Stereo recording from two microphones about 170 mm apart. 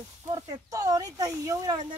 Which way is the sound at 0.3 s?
20° right (ahead or behind).